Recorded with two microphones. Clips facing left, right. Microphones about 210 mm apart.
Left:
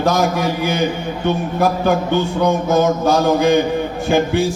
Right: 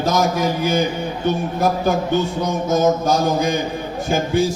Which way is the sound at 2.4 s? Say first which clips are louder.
Left 6 dB; 65° left (ahead or behind).